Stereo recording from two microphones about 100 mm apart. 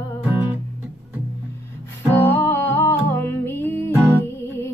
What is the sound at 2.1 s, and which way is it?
Music, 20° left (ahead or behind).